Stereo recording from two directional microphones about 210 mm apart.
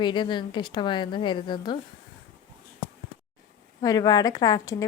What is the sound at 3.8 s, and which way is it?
Speech, 15° left (ahead or behind).